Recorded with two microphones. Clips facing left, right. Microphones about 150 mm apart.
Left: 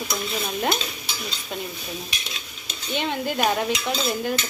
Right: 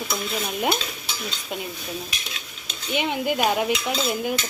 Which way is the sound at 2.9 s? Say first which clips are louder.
Right 2 dB; 15° right (ahead or behind).